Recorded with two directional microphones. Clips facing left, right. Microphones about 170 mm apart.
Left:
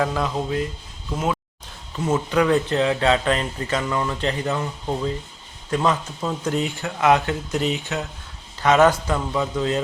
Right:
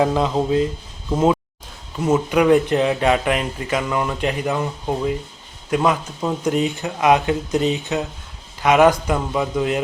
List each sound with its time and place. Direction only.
0.0 s speech: 20° right (ahead or behind)